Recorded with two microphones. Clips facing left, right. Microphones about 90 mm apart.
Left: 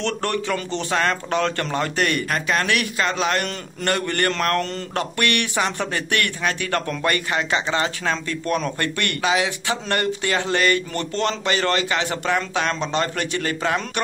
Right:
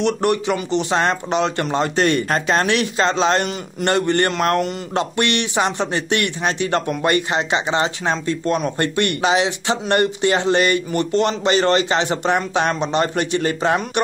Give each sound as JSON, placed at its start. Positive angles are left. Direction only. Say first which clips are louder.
{"t": 0.0, "sound": "a man's voice", "louder": "right 6 dB", "side_deg": -20}